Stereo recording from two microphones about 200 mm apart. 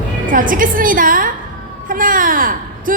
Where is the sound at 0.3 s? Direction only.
40° right (ahead or behind).